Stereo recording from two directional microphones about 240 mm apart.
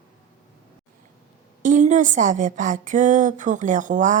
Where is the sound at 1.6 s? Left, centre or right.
Right.